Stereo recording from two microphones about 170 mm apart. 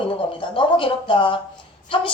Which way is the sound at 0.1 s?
30° left (ahead or behind).